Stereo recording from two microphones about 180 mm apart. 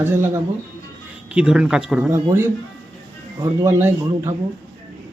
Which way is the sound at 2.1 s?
15° right (ahead or behind).